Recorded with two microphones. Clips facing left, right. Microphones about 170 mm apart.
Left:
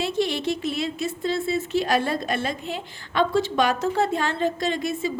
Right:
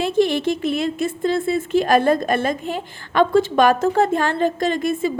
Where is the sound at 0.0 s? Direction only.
50° right (ahead or behind).